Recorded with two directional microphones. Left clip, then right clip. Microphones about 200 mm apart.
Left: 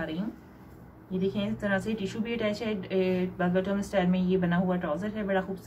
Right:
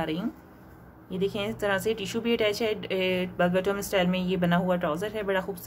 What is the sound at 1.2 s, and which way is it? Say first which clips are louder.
A woman's voice: right 3 dB; 55° right (ahead or behind).